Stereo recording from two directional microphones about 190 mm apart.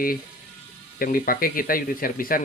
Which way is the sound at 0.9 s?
50° left (ahead or behind).